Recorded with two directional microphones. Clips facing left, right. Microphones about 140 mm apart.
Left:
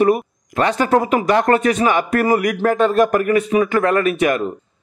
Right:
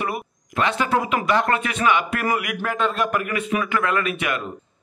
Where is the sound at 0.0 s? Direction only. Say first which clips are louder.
Left 12 dB; 40° left (ahead or behind).